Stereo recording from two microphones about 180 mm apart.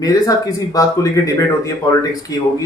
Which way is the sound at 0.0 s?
20° left (ahead or behind).